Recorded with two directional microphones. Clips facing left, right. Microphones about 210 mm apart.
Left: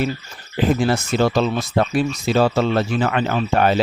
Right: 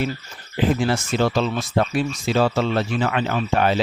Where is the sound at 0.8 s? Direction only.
40° left (ahead or behind).